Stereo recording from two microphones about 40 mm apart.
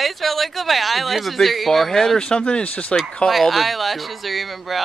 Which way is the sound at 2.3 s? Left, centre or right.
Left.